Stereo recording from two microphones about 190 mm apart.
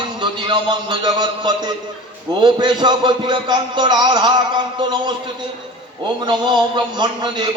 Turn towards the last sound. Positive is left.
turn(degrees=-20)  # may be behind; listen again after turning